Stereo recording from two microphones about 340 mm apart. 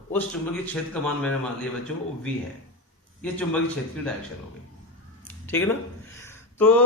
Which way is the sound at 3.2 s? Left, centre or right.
Centre.